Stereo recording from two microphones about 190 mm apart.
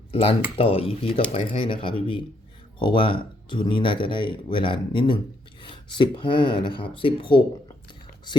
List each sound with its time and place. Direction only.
0.1 s speech: 30° left (ahead or behind)